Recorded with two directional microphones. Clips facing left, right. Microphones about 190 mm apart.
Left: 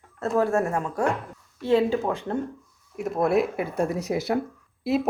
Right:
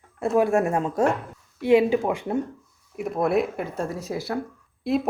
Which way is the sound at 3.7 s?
15° left (ahead or behind).